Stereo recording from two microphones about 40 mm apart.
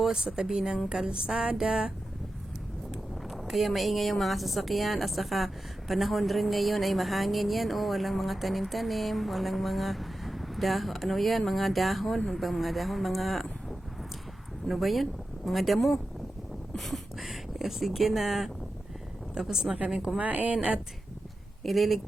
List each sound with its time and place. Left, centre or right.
0.0 s a woman's voice: centre
2.9 s a sound: centre
3.5 s a woman's voice: centre
20.1 s a woman's voice: right
20.6 s a woman's voice: right
21.6 s speech: centre